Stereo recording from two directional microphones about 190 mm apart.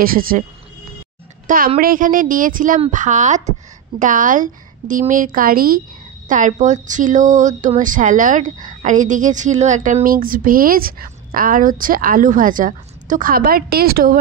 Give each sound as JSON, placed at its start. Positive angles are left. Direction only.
{"t": 0.0, "sound": "speech", "side_deg": -50}
{"t": 1.8, "sound": "speech", "side_deg": -45}